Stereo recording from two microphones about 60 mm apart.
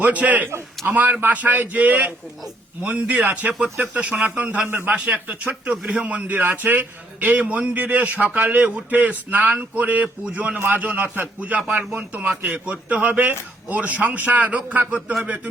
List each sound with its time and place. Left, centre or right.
0.0 s a man's voice: right
4.7 s speech: right
4.9 s a man's voice: right